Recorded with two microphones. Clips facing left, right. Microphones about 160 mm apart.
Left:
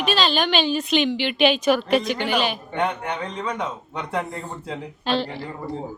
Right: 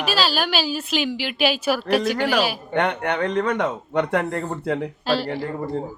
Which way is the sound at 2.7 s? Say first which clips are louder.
Right 3 dB; 65° right (ahead or behind).